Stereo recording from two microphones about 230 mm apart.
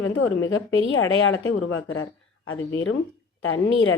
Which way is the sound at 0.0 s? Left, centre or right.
Left.